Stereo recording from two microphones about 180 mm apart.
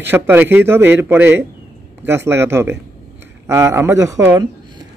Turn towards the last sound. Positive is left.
turn(degrees=-20)  # may be behind; listen again after turning